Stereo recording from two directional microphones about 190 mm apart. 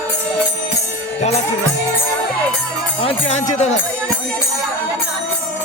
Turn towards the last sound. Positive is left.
turn(degrees=35)  # may be behind; listen again after turning